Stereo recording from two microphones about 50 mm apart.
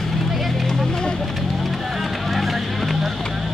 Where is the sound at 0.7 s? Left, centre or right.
Centre.